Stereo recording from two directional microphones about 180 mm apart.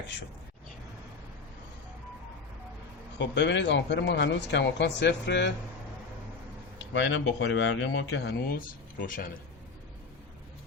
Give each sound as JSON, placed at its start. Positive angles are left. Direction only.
{"t": 3.2, "sound": "speech", "side_deg": 80}
{"t": 6.9, "sound": "speech", "side_deg": 90}